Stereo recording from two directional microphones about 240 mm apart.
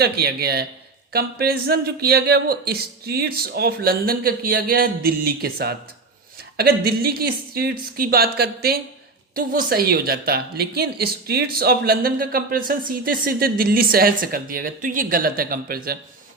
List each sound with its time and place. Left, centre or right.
0.0 s a woman's voice: right